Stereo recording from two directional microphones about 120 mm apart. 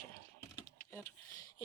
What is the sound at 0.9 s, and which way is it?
Speech, 25° left (ahead or behind).